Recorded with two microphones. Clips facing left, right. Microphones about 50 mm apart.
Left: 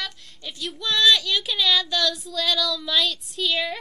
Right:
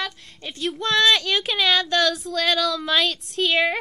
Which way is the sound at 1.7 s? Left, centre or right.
Right.